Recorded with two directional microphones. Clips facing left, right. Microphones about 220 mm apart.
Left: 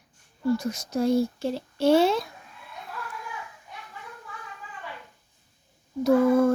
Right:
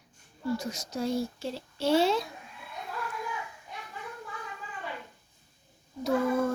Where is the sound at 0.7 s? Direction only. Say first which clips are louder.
Left 7 dB; 55° left (ahead or behind).